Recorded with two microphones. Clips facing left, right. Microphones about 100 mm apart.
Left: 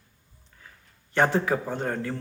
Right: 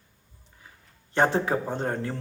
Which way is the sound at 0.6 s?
20° right (ahead or behind).